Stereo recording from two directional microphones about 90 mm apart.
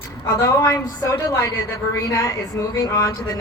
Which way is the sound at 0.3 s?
35° left (ahead or behind).